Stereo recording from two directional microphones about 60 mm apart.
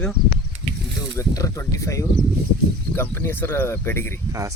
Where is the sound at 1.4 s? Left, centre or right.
Left.